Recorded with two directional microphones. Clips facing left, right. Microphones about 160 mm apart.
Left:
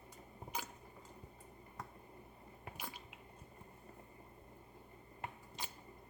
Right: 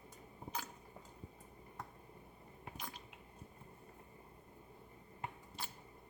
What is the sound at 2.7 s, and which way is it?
Drip, 5° left (ahead or behind).